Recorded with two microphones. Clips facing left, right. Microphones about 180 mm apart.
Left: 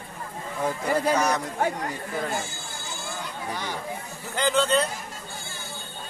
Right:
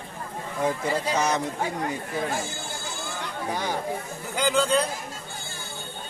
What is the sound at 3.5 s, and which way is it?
Speech, 50° right (ahead or behind).